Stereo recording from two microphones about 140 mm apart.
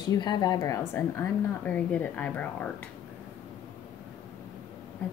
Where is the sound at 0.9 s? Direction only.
10° left (ahead or behind).